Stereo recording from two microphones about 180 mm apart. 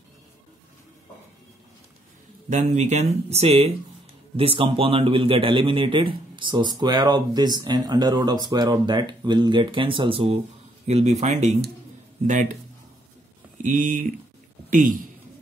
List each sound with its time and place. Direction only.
2.5 s speech: 40° right (ahead or behind)
13.6 s speech: 45° right (ahead or behind)